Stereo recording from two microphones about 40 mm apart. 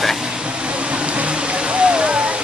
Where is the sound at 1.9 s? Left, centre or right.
Right.